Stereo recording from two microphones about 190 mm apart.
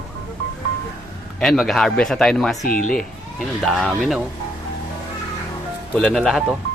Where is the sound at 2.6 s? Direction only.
45° left (ahead or behind).